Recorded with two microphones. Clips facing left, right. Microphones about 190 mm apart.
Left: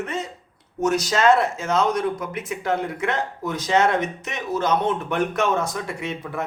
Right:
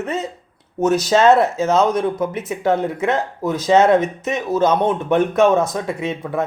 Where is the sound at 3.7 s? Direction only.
25° right (ahead or behind).